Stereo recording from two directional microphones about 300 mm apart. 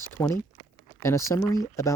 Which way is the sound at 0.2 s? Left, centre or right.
Centre.